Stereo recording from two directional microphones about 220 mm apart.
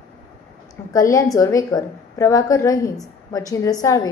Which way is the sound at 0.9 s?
15° left (ahead or behind).